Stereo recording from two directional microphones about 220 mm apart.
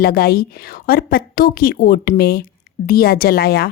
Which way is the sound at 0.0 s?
45° left (ahead or behind).